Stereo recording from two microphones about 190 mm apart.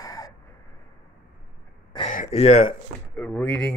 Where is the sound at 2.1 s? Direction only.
35° left (ahead or behind).